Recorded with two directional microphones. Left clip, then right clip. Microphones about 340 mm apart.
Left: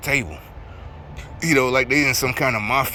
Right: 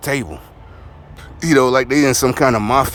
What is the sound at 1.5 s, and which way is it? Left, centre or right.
Speech, centre.